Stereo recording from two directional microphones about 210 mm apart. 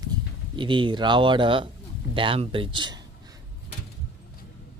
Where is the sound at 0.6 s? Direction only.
25° right (ahead or behind).